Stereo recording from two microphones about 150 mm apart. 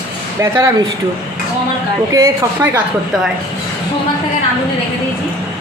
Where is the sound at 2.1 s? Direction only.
20° right (ahead or behind).